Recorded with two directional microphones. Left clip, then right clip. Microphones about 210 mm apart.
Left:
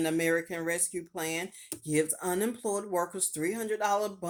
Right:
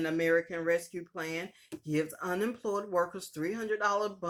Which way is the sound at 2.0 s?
30° left (ahead or behind).